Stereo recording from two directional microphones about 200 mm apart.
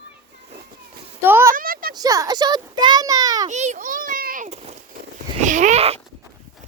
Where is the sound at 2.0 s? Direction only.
15° right (ahead or behind).